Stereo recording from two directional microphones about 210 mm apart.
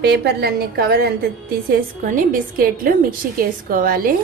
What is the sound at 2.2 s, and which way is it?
A woman's voice, 40° right (ahead or behind).